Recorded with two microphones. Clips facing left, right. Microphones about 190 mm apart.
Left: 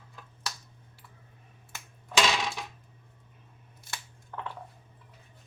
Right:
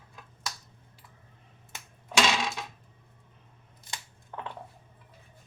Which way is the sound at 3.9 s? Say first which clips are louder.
Even; 15° right (ahead or behind).